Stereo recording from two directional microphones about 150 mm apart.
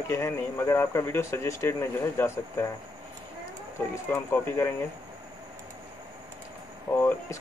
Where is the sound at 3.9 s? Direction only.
15° left (ahead or behind).